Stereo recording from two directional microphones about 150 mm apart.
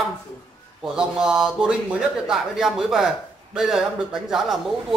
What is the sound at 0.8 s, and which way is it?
Speech, 5° right (ahead or behind).